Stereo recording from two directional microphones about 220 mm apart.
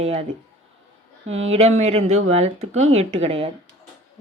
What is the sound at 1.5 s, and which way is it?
A woman's voice, 30° right (ahead or behind).